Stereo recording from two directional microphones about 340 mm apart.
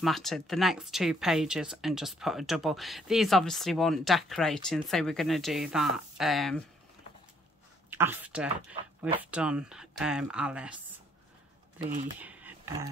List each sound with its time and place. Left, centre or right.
0.0 s speech: centre
7.9 s speech: centre
11.8 s speech: right
12.2 s a sound: centre